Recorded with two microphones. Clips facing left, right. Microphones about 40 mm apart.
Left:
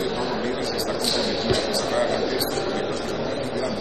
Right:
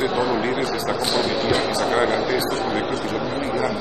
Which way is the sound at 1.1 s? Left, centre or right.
Right.